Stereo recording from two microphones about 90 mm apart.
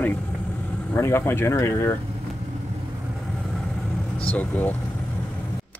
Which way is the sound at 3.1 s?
Centre (ahead or behind).